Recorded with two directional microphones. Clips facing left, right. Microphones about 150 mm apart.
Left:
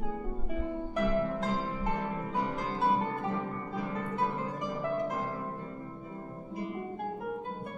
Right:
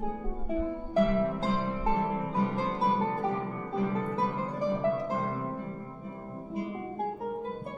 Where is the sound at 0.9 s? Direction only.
30° right (ahead or behind).